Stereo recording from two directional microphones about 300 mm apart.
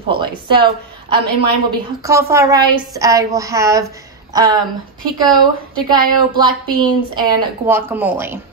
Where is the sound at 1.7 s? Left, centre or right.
Centre.